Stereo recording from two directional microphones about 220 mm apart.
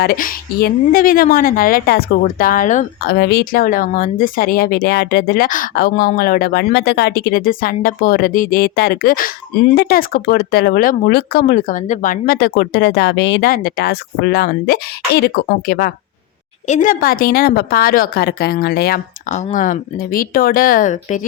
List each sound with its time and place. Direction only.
0.0 s a woman's voice: 40° left (ahead or behind)